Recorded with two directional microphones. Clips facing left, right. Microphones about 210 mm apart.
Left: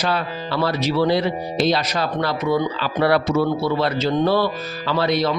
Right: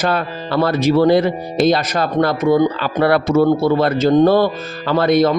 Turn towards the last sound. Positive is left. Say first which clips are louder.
# right 6 dB
turn(degrees=-50)  # may be behind; listen again after turning